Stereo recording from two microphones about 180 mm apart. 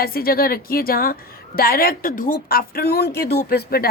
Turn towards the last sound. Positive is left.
turn(degrees=60)  # may be behind; listen again after turning